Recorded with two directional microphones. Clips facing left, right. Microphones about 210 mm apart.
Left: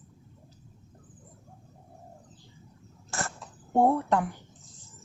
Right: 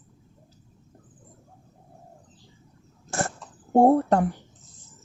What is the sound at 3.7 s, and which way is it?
Speech, 35° right (ahead or behind).